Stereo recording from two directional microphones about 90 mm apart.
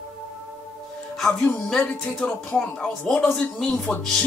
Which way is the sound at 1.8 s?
15° left (ahead or behind).